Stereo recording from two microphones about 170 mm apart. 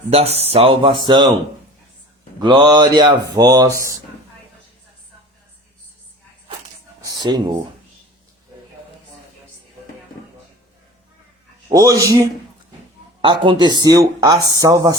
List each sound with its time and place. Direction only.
0.1 s speech: 35° right (ahead or behind)
2.4 s speech: 25° right (ahead or behind)
7.0 s a sound: 25° right (ahead or behind)
11.7 s speech: 20° right (ahead or behind)
13.2 s speech: 30° right (ahead or behind)